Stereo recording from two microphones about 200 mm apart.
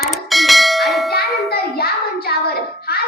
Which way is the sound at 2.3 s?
50° left (ahead or behind).